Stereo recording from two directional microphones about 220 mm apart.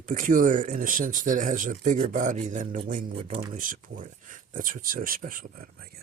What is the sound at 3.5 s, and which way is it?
Speech, 40° right (ahead or behind).